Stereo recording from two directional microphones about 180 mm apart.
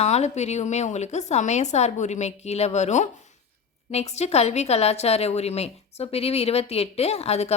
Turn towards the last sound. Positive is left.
turn(degrees=35)  # may be behind; listen again after turning